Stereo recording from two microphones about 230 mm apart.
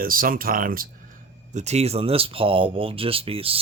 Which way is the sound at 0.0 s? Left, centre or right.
Right.